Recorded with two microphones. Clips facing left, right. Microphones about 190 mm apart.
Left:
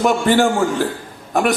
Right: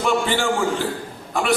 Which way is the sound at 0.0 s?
45° left (ahead or behind).